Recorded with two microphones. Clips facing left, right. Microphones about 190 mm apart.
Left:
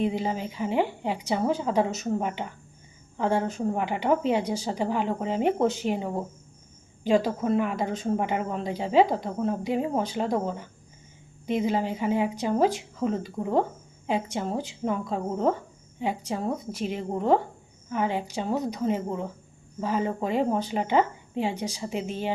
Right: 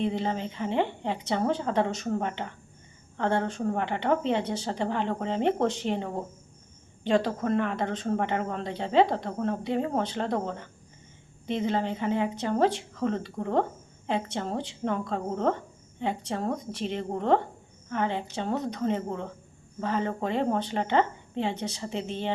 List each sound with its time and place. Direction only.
0.0 s a woman's voice: 10° left (ahead or behind)